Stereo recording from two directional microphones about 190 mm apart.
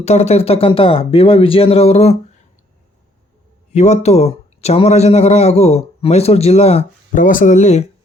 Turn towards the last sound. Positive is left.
turn(degrees=35)  # may be behind; listen again after turning